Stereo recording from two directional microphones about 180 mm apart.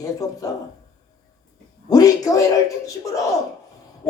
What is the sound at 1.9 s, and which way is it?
Speech, 20° left (ahead or behind).